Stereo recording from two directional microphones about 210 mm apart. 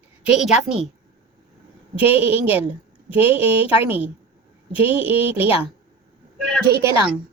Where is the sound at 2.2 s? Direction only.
25° left (ahead or behind).